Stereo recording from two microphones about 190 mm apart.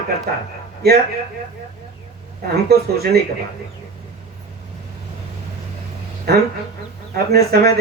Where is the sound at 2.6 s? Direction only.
55° right (ahead or behind).